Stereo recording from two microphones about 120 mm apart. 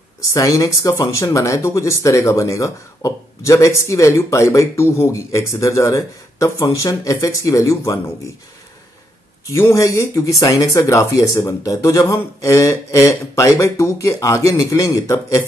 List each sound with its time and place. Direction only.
0.3 s speech: 30° left (ahead or behind)
9.5 s speech: 25° left (ahead or behind)